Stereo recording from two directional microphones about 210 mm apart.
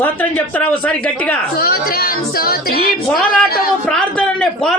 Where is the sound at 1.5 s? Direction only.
45° left (ahead or behind).